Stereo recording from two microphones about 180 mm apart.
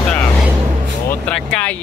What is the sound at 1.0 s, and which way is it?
Speech, 5° left (ahead or behind).